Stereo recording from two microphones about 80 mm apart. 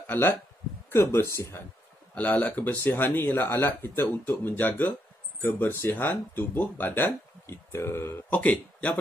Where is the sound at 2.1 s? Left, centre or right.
Centre.